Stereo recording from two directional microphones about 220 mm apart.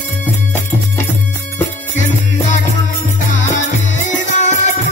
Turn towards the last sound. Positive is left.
turn(degrees=35)  # may be behind; listen again after turning